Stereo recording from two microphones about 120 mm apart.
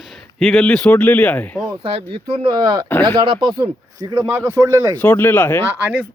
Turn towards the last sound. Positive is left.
turn(degrees=-10)  # may be behind; listen again after turning